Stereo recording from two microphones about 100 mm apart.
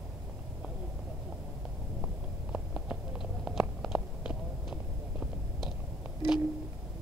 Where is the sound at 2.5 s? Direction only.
5° right (ahead or behind).